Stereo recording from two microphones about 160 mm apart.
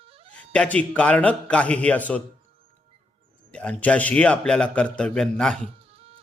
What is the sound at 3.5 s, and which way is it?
A man's voice, 10° left (ahead or behind).